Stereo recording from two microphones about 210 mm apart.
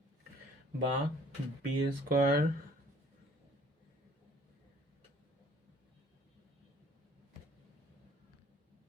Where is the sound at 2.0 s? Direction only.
45° right (ahead or behind).